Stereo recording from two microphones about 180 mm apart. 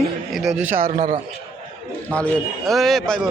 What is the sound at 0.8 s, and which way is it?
Speech, 55° right (ahead or behind).